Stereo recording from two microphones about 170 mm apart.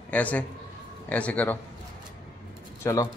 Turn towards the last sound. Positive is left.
turn(degrees=20)  # may be behind; listen again after turning